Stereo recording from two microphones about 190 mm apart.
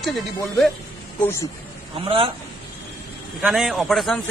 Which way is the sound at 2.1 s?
30° right (ahead or behind).